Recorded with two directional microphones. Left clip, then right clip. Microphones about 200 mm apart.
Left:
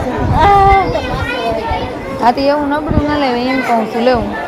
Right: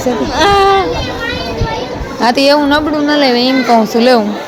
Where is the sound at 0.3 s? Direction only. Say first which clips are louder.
Left 1 dB; 50° right (ahead or behind).